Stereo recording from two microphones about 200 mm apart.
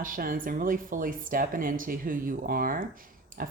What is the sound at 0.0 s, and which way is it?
Speech, 45° right (ahead or behind).